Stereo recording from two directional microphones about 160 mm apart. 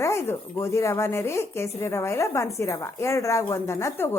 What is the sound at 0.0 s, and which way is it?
A woman's voice, 15° left (ahead or behind).